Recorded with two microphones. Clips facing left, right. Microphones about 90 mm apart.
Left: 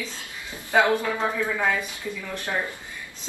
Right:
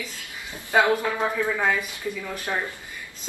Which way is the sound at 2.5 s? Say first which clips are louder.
Even; centre (ahead or behind).